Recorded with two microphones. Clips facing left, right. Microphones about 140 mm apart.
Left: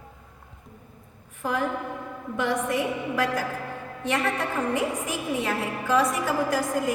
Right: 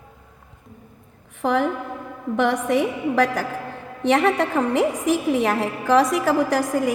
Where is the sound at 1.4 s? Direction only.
80° right.